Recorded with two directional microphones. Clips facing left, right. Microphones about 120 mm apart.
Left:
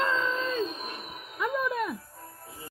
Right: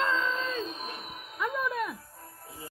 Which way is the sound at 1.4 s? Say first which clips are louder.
Left 2 dB; 5° left (ahead or behind).